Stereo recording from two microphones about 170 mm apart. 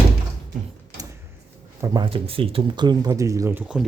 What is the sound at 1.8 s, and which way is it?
Speech, 25° right (ahead or behind).